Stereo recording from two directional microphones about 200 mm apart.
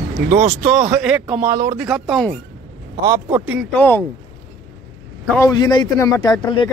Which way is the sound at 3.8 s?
10° left (ahead or behind).